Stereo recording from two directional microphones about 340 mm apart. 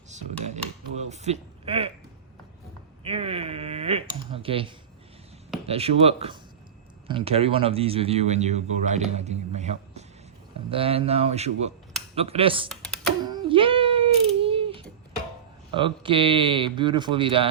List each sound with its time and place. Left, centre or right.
0.2 s a sound: centre
3.0 s a sound: centre
5.6 s a man's voice: centre
12.6 s computer keyboard: centre
13.2 s cat: centre
15.7 s speech: centre